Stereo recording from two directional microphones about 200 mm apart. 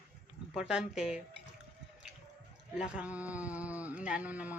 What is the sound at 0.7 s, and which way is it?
Speech, 5° right (ahead or behind).